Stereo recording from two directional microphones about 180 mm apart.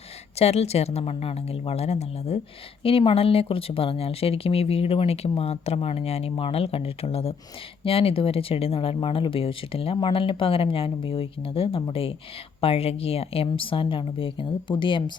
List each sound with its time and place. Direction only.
0.3 s speech: 35° left (ahead or behind)